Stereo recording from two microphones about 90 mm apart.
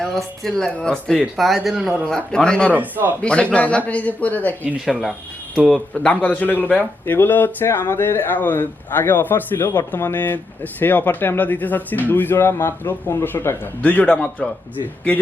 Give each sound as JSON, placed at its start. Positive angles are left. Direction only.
{"t": 0.0, "sound": "speech", "side_deg": 5}
{"t": 2.0, "sound": "speech", "side_deg": 5}
{"t": 2.7, "sound": "speech", "side_deg": -20}
{"t": 3.2, "sound": "speech", "side_deg": 10}
{"t": 4.9, "sound": "speech", "side_deg": -5}
{"t": 5.9, "sound": "speech", "side_deg": 15}
{"t": 13.8, "sound": "speech", "side_deg": 15}